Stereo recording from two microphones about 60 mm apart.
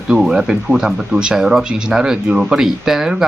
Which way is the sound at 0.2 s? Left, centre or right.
Centre.